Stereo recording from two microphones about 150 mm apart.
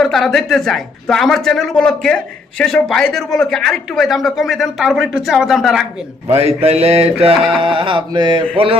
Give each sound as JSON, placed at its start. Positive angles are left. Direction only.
{"t": 0.0, "sound": "speech", "side_deg": 0}
{"t": 6.6, "sound": "speech", "side_deg": -40}
{"t": 7.3, "sound": "speech", "side_deg": 0}
{"t": 7.6, "sound": "speech", "side_deg": -35}